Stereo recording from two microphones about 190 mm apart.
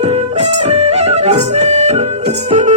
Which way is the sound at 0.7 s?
35° right (ahead or behind).